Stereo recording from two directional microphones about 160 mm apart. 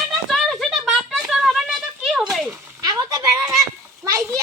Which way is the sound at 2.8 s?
25° right (ahead or behind).